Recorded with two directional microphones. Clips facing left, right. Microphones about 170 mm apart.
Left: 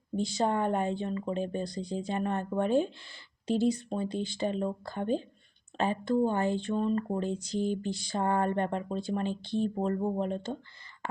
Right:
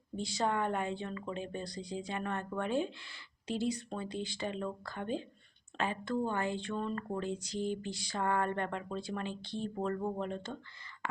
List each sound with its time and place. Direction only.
0.4 s speech: 35° left (ahead or behind)
1.8 s speech: 50° left (ahead or behind)
2.2 s speech: 30° left (ahead or behind)
3.8 s speech: 30° left (ahead or behind)
4.4 s speech: 30° left (ahead or behind)
8.1 s speech: 30° left (ahead or behind)